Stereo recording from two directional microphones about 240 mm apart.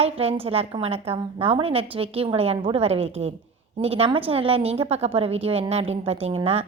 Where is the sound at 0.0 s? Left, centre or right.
Right.